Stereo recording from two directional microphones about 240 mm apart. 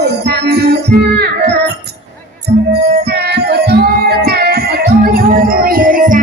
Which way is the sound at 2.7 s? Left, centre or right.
Right.